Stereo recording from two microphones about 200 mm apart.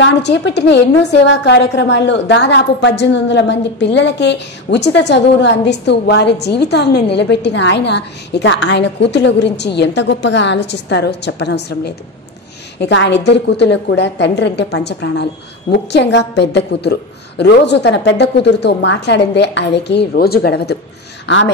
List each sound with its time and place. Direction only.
0.0 s a woman's voice: 60° left (ahead or behind)